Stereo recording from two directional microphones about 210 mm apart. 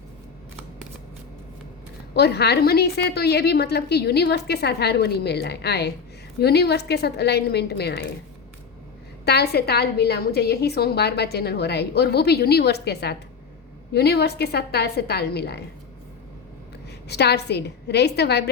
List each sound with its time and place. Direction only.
2.1 s a woman's voice: 50° left (ahead or behind)
9.2 s a woman's voice: 50° left (ahead or behind)
17.1 s a woman's voice: 50° left (ahead or behind)